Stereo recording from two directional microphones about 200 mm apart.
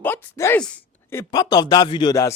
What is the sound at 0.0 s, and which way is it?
Speech, 10° left (ahead or behind).